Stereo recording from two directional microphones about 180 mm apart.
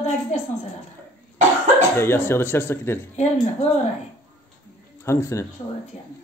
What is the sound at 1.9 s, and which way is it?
Speech, 10° left (ahead or behind).